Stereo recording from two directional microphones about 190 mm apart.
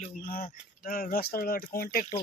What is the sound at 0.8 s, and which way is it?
A man's voice, 50° left (ahead or behind).